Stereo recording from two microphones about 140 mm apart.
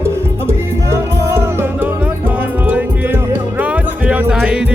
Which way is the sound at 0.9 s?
20° right (ahead or behind).